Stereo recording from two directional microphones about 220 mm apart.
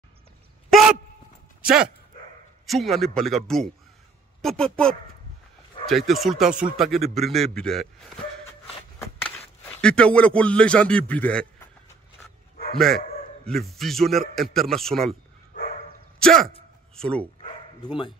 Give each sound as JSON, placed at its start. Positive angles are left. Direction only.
{"t": 1.6, "sound": "a man's voice", "side_deg": -5}
{"t": 9.8, "sound": "a man's voice", "side_deg": 5}
{"t": 12.7, "sound": "a man's voice", "side_deg": 0}
{"t": 16.2, "sound": "speech", "side_deg": 5}
{"t": 17.8, "sound": "speech", "side_deg": 20}